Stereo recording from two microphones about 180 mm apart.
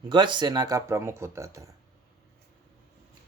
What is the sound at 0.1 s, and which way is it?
Speech, 25° right (ahead or behind).